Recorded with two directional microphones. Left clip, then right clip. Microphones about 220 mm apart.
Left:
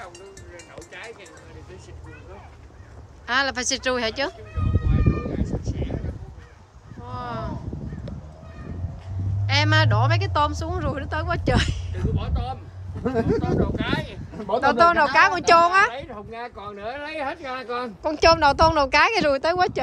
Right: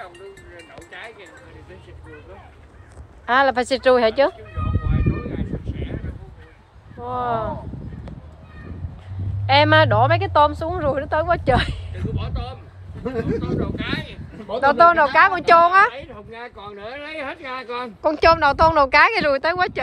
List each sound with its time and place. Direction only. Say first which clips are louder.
3.3 s speech: right 6 dB; 10° left (ahead or behind)
4.8 s a sound: left 2 dB; 20° right (ahead or behind)
7.1 s speech: right 9 dB; 5° left (ahead or behind)
9.5 s speech: right 7 dB; 5° left (ahead or behind)
11.9 s a sound: even; 50° left (ahead or behind)
13.4 s speech: left 1 dB; 55° left (ahead or behind)
14.6 s speech: right 4 dB; 15° left (ahead or behind)
15.9 s speech: left 1 dB; 5° left (ahead or behind)